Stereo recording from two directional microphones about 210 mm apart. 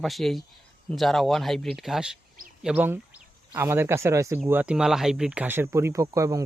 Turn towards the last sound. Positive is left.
turn(degrees=-15)  # may be behind; listen again after turning